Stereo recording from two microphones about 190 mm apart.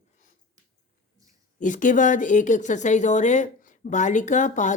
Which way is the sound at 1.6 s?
40° left (ahead or behind).